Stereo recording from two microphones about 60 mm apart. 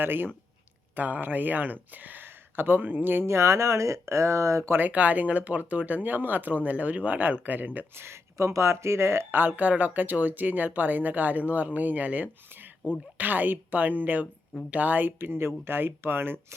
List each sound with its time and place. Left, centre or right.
0.0 s speech: right
3.2 s speech: right
4.7 s speech: right
7.9 s speech: right
9.4 s speech: right